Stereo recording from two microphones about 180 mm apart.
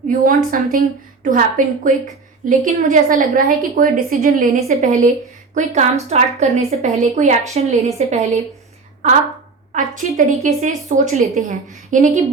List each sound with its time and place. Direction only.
0.1 s a woman's voice: 50° right (ahead or behind)
4.7 s a woman's voice: 40° right (ahead or behind)
9.7 s a woman's voice: 45° right (ahead or behind)